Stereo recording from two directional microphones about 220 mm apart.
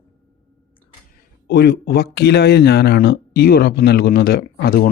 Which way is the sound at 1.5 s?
50° left (ahead or behind).